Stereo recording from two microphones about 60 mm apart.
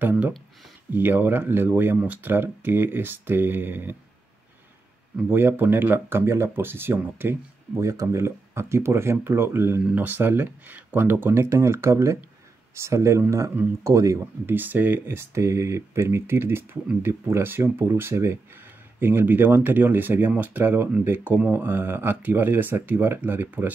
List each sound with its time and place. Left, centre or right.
0.9 s speech: right
5.3 s speech: right
7.7 s speech: right
13.8 s speech: right
14.4 s speech: right
15.1 s speech: right